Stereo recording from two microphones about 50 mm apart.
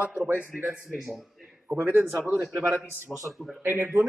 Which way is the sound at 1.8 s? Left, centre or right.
Right.